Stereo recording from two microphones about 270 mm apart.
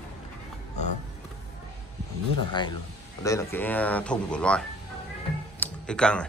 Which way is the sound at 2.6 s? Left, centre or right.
Centre.